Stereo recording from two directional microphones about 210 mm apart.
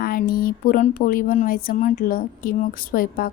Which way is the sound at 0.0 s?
45° left (ahead or behind).